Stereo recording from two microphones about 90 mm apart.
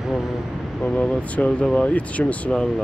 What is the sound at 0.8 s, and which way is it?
Speech, 10° left (ahead or behind).